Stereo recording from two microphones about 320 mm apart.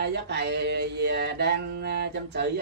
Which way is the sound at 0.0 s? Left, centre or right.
Right.